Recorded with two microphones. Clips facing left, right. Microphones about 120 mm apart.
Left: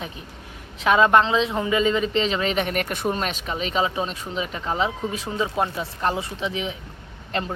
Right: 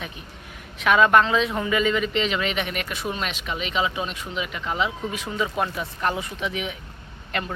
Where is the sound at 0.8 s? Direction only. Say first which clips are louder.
Left 1 dB; 30° left (ahead or behind).